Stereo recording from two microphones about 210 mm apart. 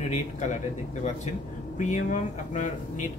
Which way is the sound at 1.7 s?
35° left (ahead or behind).